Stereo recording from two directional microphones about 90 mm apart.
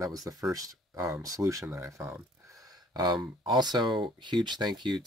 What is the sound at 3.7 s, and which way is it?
Speech, 60° right (ahead or behind).